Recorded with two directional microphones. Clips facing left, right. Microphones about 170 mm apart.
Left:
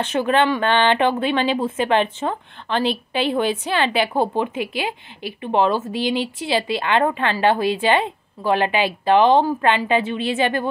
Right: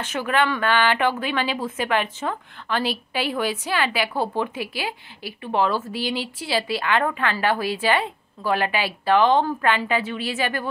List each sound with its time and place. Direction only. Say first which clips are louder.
0.0 s a woman's voice: left 5 dB; 25° left (ahead or behind)